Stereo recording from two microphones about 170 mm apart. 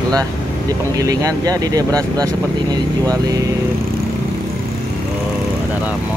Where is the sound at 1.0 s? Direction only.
20° right (ahead or behind).